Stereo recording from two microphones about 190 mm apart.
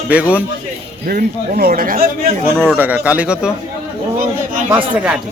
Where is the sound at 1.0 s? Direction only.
50° right (ahead or behind).